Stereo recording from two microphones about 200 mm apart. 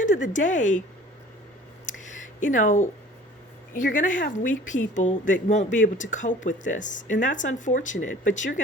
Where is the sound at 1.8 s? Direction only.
40° left (ahead or behind).